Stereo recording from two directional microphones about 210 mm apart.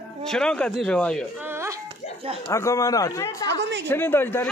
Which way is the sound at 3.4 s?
55° right (ahead or behind).